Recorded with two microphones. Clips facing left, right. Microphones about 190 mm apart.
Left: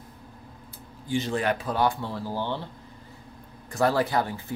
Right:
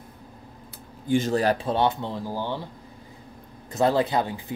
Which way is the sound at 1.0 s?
45° right (ahead or behind).